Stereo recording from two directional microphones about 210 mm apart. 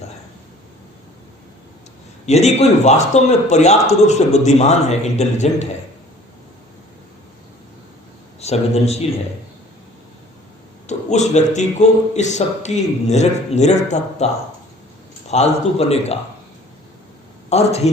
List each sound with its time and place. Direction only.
2.2 s a man's voice: 30° left (ahead or behind)
8.4 s speech: 30° left (ahead or behind)
10.8 s a man's voice: 35° left (ahead or behind)
15.3 s a man's voice: 30° left (ahead or behind)
17.5 s a man's voice: 30° left (ahead or behind)